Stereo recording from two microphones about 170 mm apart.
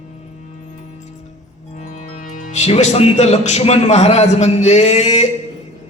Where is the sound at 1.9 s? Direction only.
50° left (ahead or behind).